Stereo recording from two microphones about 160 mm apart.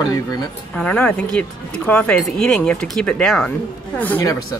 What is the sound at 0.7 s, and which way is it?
Speech, 5° left (ahead or behind).